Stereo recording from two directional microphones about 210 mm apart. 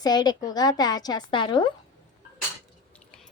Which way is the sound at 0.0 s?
20° left (ahead or behind).